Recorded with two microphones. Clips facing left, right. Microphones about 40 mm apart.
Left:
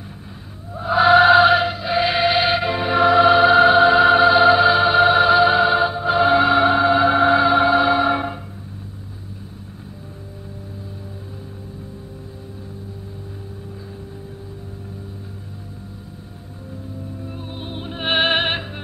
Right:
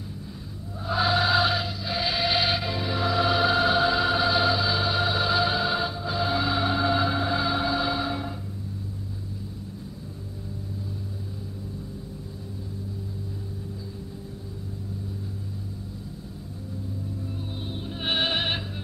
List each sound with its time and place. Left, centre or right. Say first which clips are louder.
0.7 s music: left 11 dB; left
7.2 s music: left 11 dB; left
17.3 s music: left 3 dB; left